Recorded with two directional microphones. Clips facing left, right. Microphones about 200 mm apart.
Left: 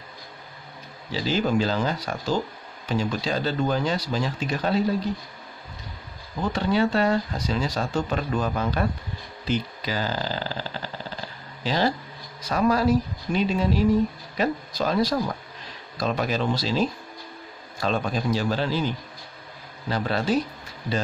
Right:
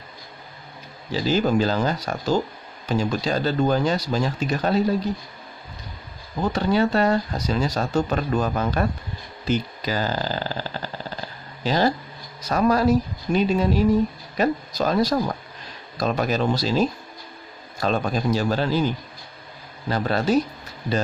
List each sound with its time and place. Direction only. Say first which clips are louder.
1.1 s speech: right 3 dB; 45° right (ahead or behind)
6.4 s speech: right 2 dB; 40° right (ahead or behind)